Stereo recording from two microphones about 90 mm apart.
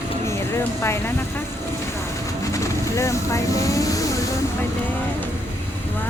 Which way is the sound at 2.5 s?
35° left (ahead or behind).